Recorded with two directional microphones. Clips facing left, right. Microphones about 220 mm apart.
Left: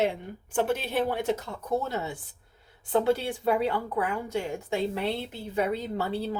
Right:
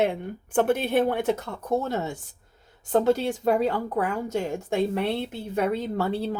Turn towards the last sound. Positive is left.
turn(degrees=-50)  # may be behind; listen again after turning